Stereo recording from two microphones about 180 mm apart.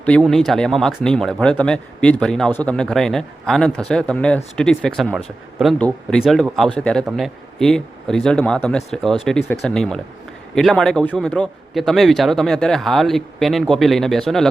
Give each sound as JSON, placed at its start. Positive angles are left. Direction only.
{"t": 0.3, "sound": "a man's voice", "side_deg": 0}